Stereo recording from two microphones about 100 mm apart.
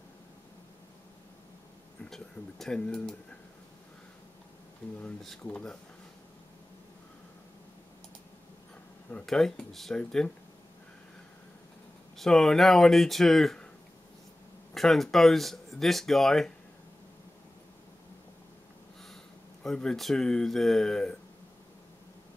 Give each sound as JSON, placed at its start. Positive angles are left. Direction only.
{"t": 2.0, "sound": "speech", "side_deg": 5}
{"t": 5.0, "sound": "speech", "side_deg": 10}
{"t": 9.1, "sound": "speech", "side_deg": 5}
{"t": 12.2, "sound": "speech", "side_deg": 5}
{"t": 14.7, "sound": "speech", "side_deg": 0}
{"t": 19.6, "sound": "speech", "side_deg": 5}